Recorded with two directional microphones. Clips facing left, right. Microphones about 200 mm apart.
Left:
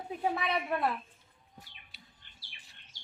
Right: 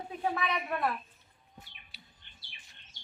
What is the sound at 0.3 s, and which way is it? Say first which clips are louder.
Speech: left 1 dB; 30° left (ahead or behind).